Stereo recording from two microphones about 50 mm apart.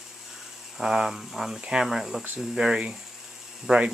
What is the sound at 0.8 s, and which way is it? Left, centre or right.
Speech, centre.